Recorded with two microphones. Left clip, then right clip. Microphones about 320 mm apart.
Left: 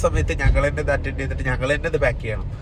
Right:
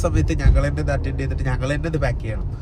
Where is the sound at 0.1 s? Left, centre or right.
Centre.